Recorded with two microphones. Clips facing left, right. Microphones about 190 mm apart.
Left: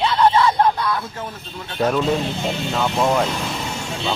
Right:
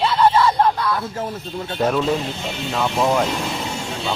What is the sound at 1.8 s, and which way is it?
Speech, centre (ahead or behind).